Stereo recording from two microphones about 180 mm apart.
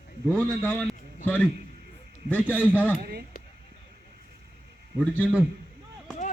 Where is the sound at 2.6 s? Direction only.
10° right (ahead or behind).